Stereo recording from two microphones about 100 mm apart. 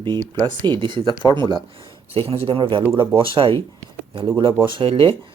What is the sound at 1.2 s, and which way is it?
Speech, 35° left (ahead or behind).